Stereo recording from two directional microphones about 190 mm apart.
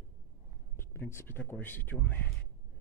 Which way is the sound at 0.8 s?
15° left (ahead or behind).